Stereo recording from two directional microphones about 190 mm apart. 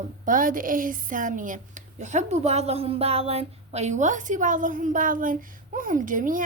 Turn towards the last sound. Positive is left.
turn(degrees=-45)  # may be behind; listen again after turning